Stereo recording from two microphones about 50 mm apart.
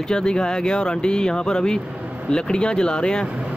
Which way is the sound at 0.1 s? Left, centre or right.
Centre.